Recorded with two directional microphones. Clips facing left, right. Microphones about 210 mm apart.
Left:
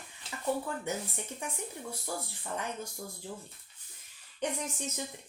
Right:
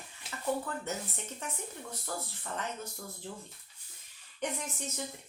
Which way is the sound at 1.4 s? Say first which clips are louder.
Left 1 dB; 15° left (ahead or behind).